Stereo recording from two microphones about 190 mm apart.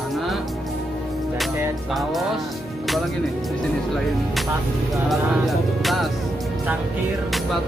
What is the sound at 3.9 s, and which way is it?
Speech, centre (ahead or behind).